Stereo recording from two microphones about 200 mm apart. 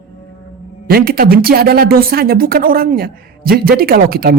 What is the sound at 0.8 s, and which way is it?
Speech, 50° right (ahead or behind).